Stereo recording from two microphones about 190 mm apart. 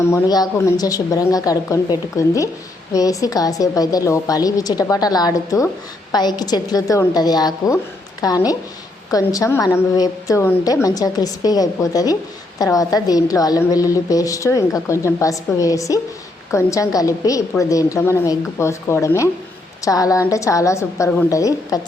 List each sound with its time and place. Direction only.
0.0 s a woman's voice: 15° left (ahead or behind)